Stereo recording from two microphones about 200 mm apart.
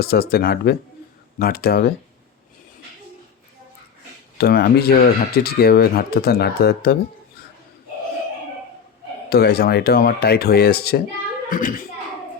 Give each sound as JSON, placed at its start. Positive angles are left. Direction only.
{"t": 0.0, "sound": "speech", "side_deg": 50}
{"t": 4.4, "sound": "speech", "side_deg": 50}
{"t": 9.3, "sound": "a woman's voice", "side_deg": 55}